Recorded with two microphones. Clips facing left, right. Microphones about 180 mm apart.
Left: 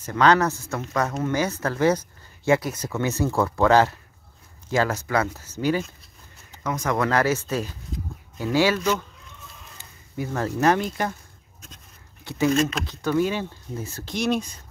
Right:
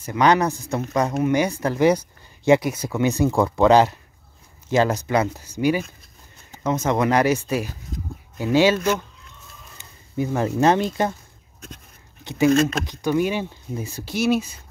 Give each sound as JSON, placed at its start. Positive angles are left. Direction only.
{"t": 0.0, "sound": "speech", "side_deg": -15}
{"t": 6.6, "sound": "speech", "side_deg": -25}
{"t": 12.5, "sound": "speech", "side_deg": -45}
{"t": 12.8, "sound": "speech", "side_deg": -15}